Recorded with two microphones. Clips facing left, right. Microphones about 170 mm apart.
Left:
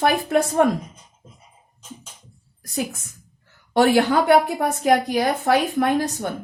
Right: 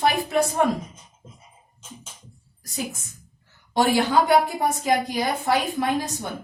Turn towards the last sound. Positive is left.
turn(degrees=60)  # may be behind; listen again after turning